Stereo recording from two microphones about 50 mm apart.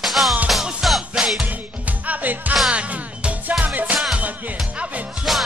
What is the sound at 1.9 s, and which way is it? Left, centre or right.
Music, right.